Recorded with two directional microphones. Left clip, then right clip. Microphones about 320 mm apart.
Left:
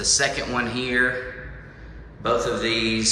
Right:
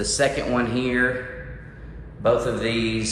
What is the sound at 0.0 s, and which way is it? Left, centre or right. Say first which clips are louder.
Speech: even; centre.